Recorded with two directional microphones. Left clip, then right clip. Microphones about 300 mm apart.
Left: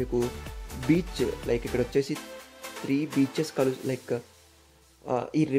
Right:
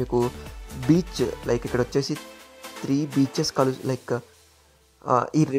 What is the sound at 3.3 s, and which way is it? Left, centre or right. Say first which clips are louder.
Speech: right 4 dB; centre.